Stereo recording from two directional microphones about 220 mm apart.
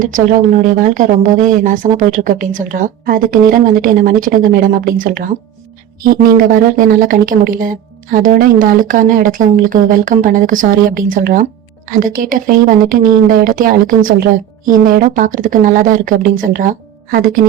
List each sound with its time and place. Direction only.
0.0 s speech: 35° right (ahead or behind)
6.3 s speech: 40° right (ahead or behind)